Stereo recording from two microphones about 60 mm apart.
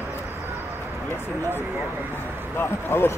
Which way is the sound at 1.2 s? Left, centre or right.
Left.